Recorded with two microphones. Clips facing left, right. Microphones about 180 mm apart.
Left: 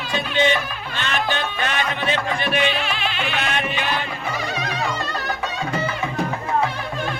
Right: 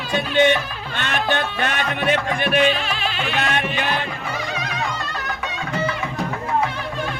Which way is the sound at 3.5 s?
50° right (ahead or behind).